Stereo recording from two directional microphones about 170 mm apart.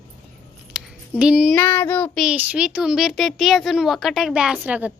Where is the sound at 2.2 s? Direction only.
5° right (ahead or behind).